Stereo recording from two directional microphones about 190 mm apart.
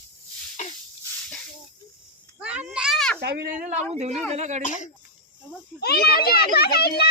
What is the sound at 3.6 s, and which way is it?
Speech, 35° right (ahead or behind).